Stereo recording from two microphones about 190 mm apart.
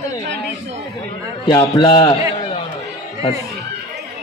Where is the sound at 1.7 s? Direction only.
25° left (ahead or behind).